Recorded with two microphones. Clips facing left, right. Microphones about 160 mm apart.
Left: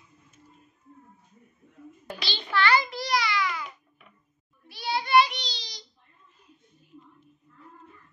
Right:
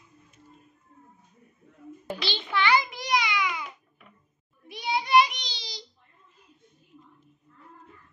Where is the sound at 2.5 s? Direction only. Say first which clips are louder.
Left 1 dB; 20° right (ahead or behind).